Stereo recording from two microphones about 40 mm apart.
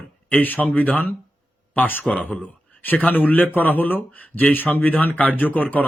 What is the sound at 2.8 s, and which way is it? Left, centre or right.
A man's voice, left.